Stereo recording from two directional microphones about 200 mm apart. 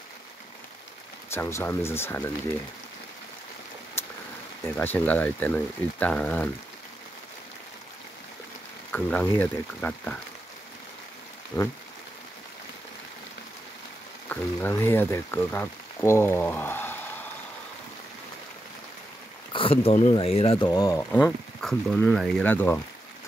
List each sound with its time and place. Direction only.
1.3 s speech: 10° left (ahead or behind)
4.6 s speech: 10° left (ahead or behind)
8.9 s speech: 10° left (ahead or behind)
11.5 s speech: 10° left (ahead or behind)
14.3 s speech: 10° left (ahead or behind)
19.5 s speech: 25° left (ahead or behind)
21.1 s speech: 5° left (ahead or behind)